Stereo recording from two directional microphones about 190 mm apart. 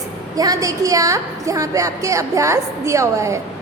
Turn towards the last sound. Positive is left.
turn(degrees=-15)  # may be behind; listen again after turning